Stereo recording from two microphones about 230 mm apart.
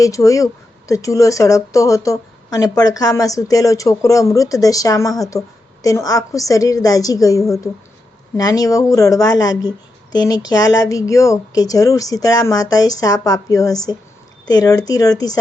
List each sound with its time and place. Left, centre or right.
0.0 s speech: centre